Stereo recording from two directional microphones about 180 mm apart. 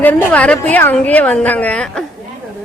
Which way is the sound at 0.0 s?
10° left (ahead or behind).